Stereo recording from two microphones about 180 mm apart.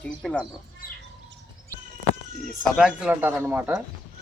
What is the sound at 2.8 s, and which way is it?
A man's voice, 10° right (ahead or behind).